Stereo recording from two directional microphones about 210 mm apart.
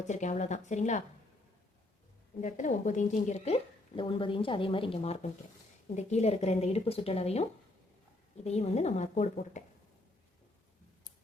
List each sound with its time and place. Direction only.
0.1 s a woman's voice: 35° left (ahead or behind)
2.4 s speech: 35° left (ahead or behind)
8.4 s a woman's voice: 30° left (ahead or behind)